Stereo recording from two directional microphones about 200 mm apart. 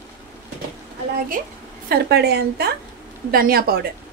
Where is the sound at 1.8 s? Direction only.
55° right (ahead or behind).